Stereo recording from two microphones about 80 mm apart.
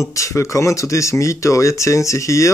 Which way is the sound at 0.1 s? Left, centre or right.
Left.